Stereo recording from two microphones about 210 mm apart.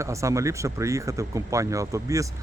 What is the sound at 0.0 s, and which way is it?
Speech, 15° right (ahead or behind).